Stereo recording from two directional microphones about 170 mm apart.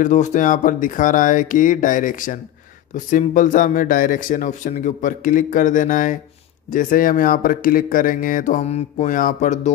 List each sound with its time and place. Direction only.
0.0 s speech: 45° left (ahead or behind)